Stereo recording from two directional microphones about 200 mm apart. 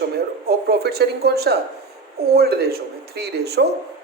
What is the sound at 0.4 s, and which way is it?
Speech, 50° right (ahead or behind).